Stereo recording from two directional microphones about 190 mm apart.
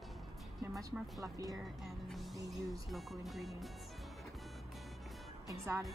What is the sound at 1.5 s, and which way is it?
Speech, centre (ahead or behind).